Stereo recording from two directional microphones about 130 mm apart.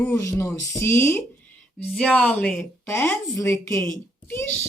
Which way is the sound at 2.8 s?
20° left (ahead or behind).